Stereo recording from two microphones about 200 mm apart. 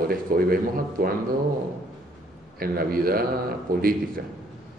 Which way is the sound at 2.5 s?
50° right (ahead or behind).